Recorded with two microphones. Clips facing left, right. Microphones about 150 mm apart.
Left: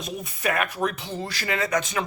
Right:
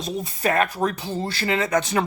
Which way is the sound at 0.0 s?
30° right (ahead or behind).